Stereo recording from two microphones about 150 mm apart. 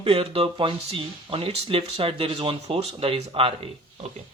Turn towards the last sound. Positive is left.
turn(degrees=-40)  # may be behind; listen again after turning